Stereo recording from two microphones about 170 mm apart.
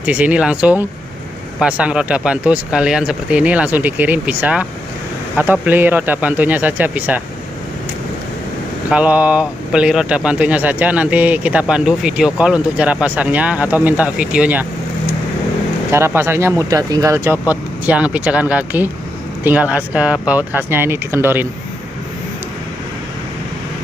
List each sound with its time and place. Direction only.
0.0 s speech: 5° right (ahead or behind)
8.9 s speech: 10° right (ahead or behind)
15.9 s speech: 15° right (ahead or behind)